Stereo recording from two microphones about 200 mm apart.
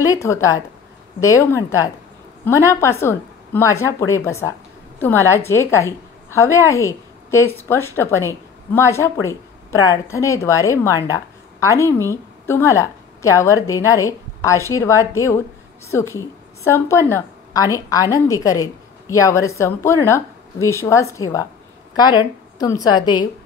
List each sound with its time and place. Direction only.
0.0 s a woman's voice: 15° left (ahead or behind)